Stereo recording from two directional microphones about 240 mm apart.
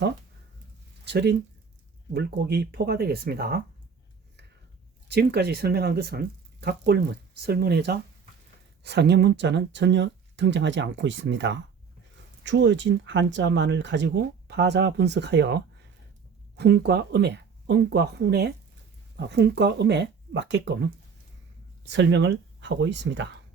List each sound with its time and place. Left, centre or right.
1.0 s speech: right
5.0 s speech: right
21.8 s speech: right